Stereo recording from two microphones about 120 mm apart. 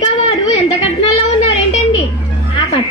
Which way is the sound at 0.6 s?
55° left (ahead or behind).